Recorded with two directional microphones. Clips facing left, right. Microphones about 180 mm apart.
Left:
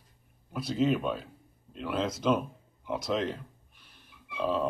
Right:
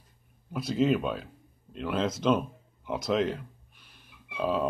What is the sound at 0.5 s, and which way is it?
Speech, centre (ahead or behind).